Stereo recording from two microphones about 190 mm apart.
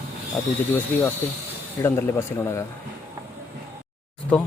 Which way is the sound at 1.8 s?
15° left (ahead or behind).